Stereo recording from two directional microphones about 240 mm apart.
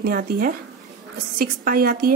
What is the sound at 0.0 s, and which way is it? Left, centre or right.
A woman's voice, right.